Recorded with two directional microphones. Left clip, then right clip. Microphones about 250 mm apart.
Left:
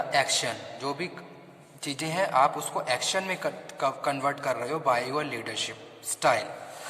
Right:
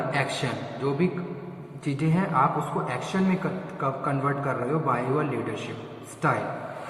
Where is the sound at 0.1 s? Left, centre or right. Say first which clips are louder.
Left 2 dB; left.